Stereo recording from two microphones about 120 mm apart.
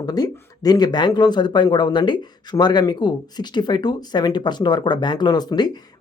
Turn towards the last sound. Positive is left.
turn(degrees=35)  # may be behind; listen again after turning